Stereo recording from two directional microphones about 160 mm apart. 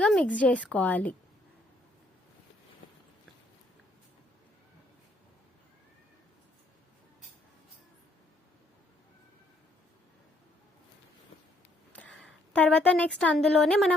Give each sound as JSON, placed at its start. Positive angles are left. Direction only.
{"t": 0.0, "sound": "a woman's voice", "side_deg": 5}
{"t": 11.9, "sound": "a woman's voice", "side_deg": 5}